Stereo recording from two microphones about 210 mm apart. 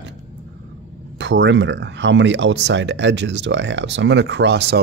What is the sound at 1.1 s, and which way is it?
Speech, 60° right (ahead or behind).